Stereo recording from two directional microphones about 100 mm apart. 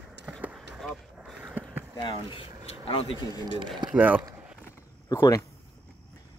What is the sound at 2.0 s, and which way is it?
Speech, 60° left (ahead or behind).